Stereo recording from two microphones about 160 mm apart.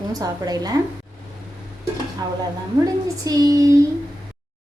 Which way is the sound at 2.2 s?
20° right (ahead or behind).